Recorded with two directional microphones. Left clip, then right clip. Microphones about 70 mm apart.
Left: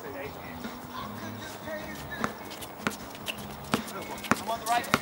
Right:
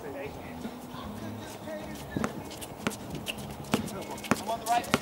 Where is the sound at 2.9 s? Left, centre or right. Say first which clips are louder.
Left 1 dB; centre.